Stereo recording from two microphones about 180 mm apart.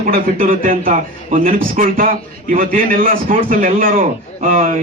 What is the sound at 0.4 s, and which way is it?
A man's voice, 50° right (ahead or behind).